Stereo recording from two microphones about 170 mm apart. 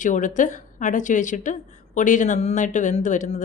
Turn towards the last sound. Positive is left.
turn(degrees=45)  # may be behind; listen again after turning